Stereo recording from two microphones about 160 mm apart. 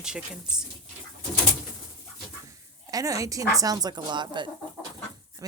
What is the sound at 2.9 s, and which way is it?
A woman's voice, 20° right (ahead or behind).